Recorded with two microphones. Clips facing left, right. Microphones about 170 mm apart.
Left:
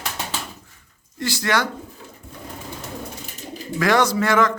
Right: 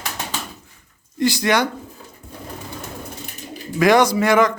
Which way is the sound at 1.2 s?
15° right (ahead or behind).